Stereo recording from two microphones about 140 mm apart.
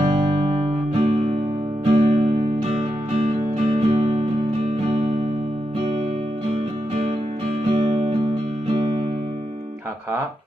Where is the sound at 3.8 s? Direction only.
55° right (ahead or behind).